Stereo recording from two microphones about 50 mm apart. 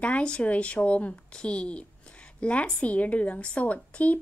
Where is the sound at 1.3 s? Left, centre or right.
Centre.